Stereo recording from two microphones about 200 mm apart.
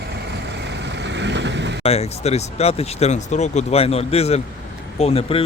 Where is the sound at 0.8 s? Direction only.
60° right (ahead or behind).